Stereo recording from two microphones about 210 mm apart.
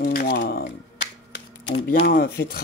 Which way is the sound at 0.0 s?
45° left (ahead or behind).